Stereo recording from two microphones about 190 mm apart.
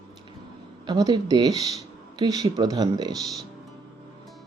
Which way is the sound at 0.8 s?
20° right (ahead or behind).